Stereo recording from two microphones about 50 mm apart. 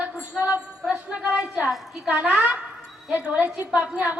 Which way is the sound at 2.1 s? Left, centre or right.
Right.